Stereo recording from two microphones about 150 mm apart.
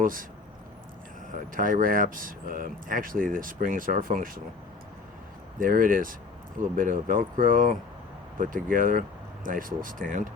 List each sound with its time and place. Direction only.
0.0 s speech: 65° right (ahead or behind)
1.3 s speech: 65° right (ahead or behind)
5.5 s speech: 65° right (ahead or behind)